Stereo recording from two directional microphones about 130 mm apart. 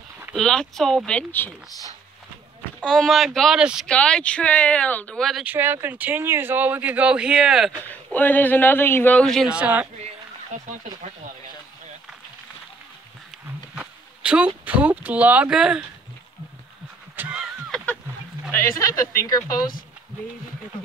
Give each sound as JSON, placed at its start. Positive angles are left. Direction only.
{"t": 0.3, "sound": "speech", "side_deg": 5}
{"t": 2.8, "sound": "speech", "side_deg": 5}
{"t": 3.8, "sound": "speech", "side_deg": 5}
{"t": 5.4, "sound": "speech", "side_deg": -15}
{"t": 7.9, "sound": "speech", "side_deg": 15}
{"t": 9.5, "sound": "speech", "side_deg": -10}
{"t": 10.5, "sound": "speech", "side_deg": -75}
{"t": 13.7, "sound": "a sound", "side_deg": -10}
{"t": 14.6, "sound": "speech", "side_deg": -10}
{"t": 17.1, "sound": "a sound", "side_deg": -10}
{"t": 17.6, "sound": "goose", "side_deg": 5}
{"t": 18.5, "sound": "speech", "side_deg": 25}